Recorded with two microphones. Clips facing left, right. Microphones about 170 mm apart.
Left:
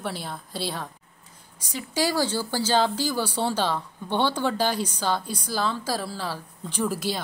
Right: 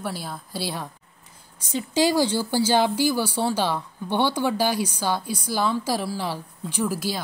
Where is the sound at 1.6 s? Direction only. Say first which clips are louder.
Right 5 dB; 25° right (ahead or behind); by 7.2 s 5° right (ahead or behind).